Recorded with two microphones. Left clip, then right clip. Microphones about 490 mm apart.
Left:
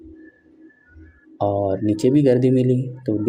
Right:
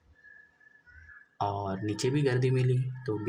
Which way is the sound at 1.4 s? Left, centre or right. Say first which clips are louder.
Left 12 dB; right.